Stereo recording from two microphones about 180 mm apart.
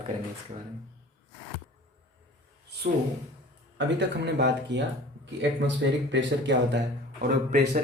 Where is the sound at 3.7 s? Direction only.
75° right (ahead or behind).